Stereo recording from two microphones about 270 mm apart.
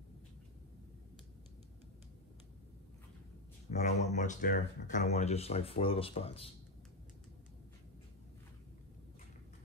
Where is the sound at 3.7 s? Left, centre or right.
Left.